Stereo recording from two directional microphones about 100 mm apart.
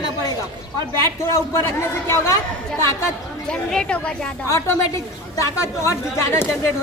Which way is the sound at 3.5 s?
10° left (ahead or behind).